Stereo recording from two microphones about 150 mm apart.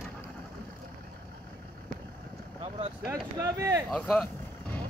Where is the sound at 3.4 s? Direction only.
20° right (ahead or behind).